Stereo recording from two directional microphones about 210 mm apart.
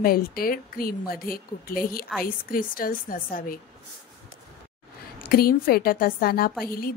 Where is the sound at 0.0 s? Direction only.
45° left (ahead or behind).